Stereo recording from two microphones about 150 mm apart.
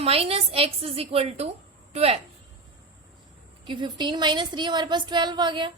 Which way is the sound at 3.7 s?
30° right (ahead or behind).